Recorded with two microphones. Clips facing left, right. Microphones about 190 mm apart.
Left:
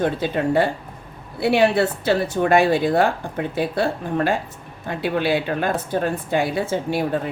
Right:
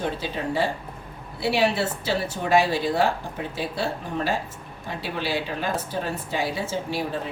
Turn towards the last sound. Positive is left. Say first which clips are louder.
# left 6 dB
turn(degrees=55)  # may be behind; listen again after turning